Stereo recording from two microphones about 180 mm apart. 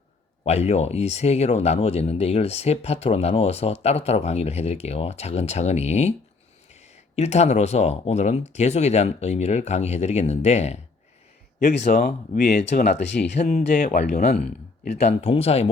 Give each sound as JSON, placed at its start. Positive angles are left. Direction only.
{"t": 0.4, "sound": "speech", "side_deg": 35}
{"t": 11.8, "sound": "speech", "side_deg": 55}